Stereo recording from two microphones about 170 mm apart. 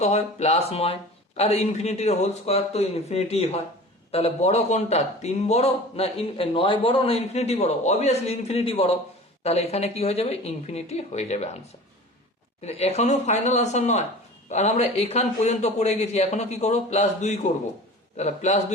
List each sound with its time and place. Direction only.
0.0 s a man's voice: 40° left (ahead or behind)
12.6 s a man's voice: 40° left (ahead or behind)